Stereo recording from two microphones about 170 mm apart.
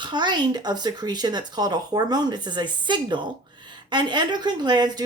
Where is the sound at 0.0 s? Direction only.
25° right (ahead or behind).